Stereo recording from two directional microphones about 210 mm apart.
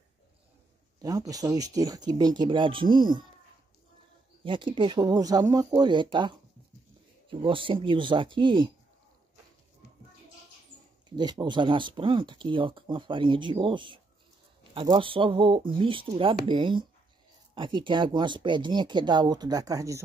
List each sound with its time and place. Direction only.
1.0 s speech: 15° right (ahead or behind)
4.5 s speech: 25° right (ahead or behind)
11.1 s speech: 20° right (ahead or behind)